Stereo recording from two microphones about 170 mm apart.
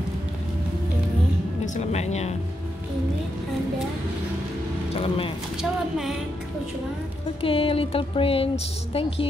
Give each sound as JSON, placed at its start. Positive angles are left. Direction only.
{"t": 1.8, "sound": "speech", "side_deg": 40}
{"t": 5.0, "sound": "speech", "side_deg": 35}
{"t": 5.6, "sound": "speech", "side_deg": 0}
{"t": 7.4, "sound": "speech", "side_deg": 35}